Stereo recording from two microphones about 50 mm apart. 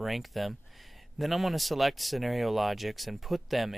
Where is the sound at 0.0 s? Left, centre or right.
Centre.